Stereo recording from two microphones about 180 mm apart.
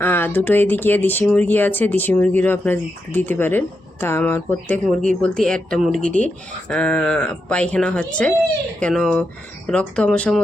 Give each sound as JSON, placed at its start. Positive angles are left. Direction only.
{"t": 0.0, "sound": "speech", "side_deg": 10}